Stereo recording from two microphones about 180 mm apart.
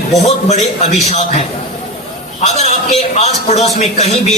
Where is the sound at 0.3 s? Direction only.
35° left (ahead or behind).